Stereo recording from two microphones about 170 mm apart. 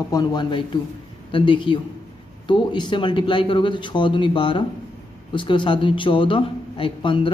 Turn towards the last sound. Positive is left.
turn(degrees=30)  # may be behind; listen again after turning